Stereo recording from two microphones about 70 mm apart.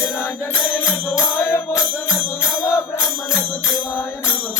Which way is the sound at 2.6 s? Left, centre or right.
Left.